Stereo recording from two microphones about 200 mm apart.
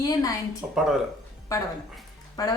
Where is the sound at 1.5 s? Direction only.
15° left (ahead or behind).